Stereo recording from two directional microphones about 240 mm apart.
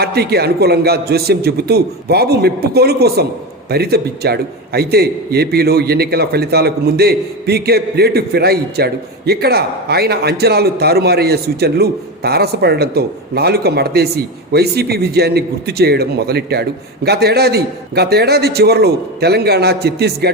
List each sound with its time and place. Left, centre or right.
0.0 s a man's voice: right